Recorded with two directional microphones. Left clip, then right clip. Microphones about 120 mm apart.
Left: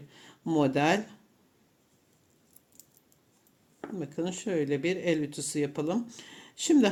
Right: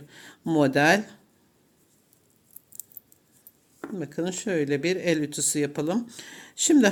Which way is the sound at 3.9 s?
30° right (ahead or behind).